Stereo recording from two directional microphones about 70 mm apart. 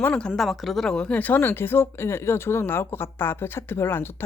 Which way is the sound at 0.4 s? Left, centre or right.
Centre.